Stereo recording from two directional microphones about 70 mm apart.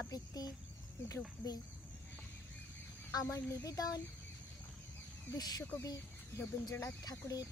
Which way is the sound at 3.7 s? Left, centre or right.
Left.